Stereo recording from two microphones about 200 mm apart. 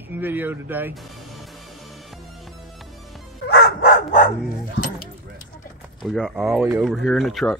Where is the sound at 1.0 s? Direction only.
Centre (ahead or behind).